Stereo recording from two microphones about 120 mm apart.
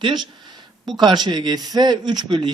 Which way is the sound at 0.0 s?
40° right (ahead or behind).